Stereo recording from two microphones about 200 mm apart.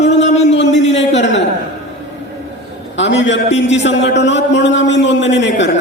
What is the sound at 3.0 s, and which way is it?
A man's voice, 65° left (ahead or behind).